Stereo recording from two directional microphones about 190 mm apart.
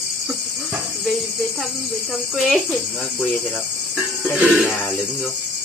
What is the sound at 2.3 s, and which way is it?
Speech, centre (ahead or behind).